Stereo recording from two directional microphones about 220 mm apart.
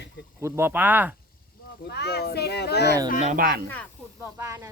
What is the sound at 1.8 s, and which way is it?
A child's voice, 50° left (ahead or behind).